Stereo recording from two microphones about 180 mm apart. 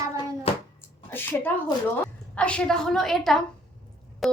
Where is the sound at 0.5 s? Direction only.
35° left (ahead or behind).